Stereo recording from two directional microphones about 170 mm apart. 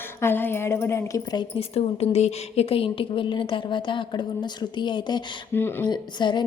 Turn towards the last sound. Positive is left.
turn(degrees=25)  # may be behind; listen again after turning